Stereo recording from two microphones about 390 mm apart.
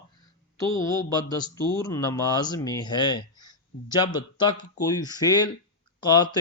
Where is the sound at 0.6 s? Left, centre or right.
Centre.